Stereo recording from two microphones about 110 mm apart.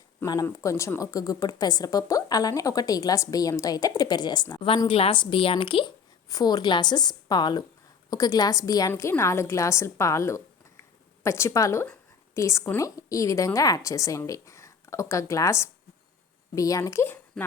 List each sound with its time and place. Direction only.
0.4 s a woman's voice: 30° left (ahead or behind)
4.5 s a woman's voice: 50° left (ahead or behind)
6.2 s a woman's voice: 35° left (ahead or behind)
8.9 s a woman's voice: 25° left (ahead or behind)